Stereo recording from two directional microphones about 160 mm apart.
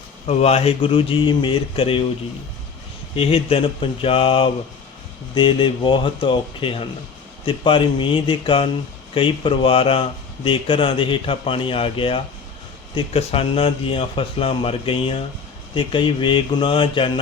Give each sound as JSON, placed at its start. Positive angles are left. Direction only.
{"t": 0.3, "sound": "speech", "side_deg": 40}
{"t": 3.2, "sound": "speech", "side_deg": 35}